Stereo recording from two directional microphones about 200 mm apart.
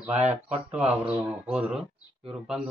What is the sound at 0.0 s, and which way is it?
Speech, 10° right (ahead or behind).